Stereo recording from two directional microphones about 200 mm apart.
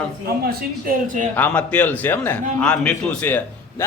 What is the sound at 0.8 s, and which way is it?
Speech, 40° right (ahead or behind).